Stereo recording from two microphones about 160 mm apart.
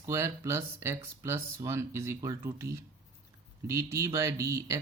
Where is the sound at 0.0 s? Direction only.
15° right (ahead or behind).